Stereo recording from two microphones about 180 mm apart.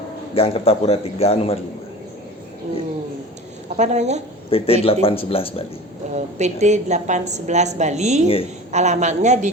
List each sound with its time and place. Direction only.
0.3 s a man's voice: 30° left (ahead or behind)
3.8 s a woman's voice: 40° right (ahead or behind)
4.4 s a man's voice: 30° left (ahead or behind)
6.1 s a woman's voice: 40° right (ahead or behind)